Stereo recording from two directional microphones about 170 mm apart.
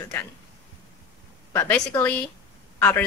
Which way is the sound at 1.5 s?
10° left (ahead or behind).